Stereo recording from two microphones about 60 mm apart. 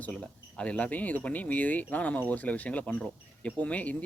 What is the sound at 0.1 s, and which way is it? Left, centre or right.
Speech, centre.